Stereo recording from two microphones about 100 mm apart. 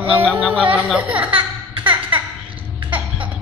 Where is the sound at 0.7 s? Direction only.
10° right (ahead or behind).